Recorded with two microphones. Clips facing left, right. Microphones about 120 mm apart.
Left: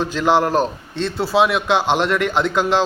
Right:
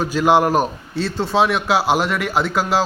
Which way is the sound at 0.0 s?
10° right (ahead or behind).